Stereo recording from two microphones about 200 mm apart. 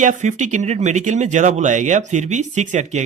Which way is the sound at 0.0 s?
35° right (ahead or behind).